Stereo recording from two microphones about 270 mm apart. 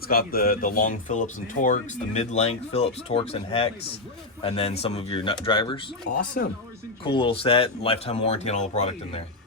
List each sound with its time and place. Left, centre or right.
0.1 s speech: left
6.1 s speech: left
7.0 s speech: centre